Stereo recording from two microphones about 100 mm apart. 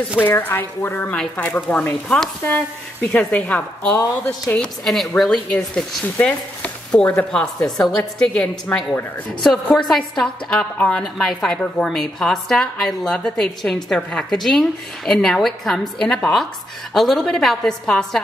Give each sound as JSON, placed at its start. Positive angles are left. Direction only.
{"t": 0.2, "sound": "a woman's voice", "side_deg": 20}
{"t": 4.8, "sound": "a woman's voice", "side_deg": 0}